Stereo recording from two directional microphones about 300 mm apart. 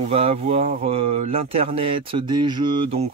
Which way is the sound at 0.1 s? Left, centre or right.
Centre.